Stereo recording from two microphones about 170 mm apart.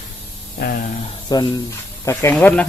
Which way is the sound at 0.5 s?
60° left (ahead or behind).